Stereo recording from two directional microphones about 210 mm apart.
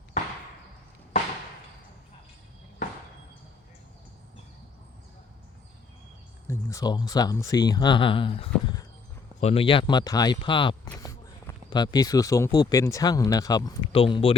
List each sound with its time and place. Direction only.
6.5 s speech: 15° left (ahead or behind)
10.9 s a sound: 15° left (ahead or behind)
12.5 s speech: 15° left (ahead or behind)